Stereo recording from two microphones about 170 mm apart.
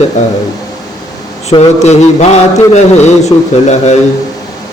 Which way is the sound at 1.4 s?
40° left (ahead or behind).